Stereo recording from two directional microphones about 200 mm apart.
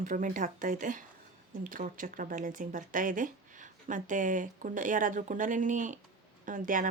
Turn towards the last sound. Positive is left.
turn(degrees=-40)  # may be behind; listen again after turning